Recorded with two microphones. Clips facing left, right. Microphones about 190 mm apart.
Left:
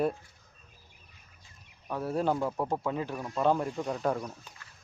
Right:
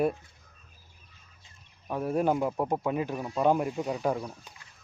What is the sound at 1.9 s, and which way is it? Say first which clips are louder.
Speech: right 3 dB; 15° right (ahead or behind).